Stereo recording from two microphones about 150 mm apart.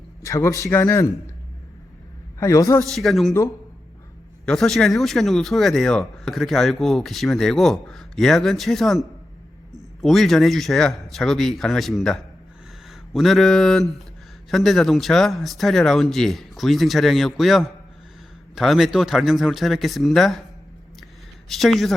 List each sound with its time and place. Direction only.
0.2 s a man's voice: 20° left (ahead or behind)
2.4 s a man's voice: 20° left (ahead or behind)
2.9 s speech: centre (ahead or behind)
4.4 s speech: 5° left (ahead or behind)
21.5 s speech: centre (ahead or behind)